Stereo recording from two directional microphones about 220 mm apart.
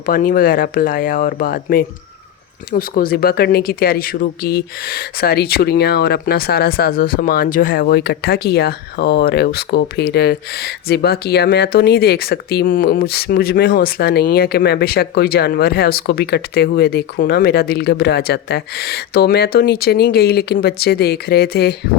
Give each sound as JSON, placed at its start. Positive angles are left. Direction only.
{"t": 0.0, "sound": "speech", "side_deg": 40}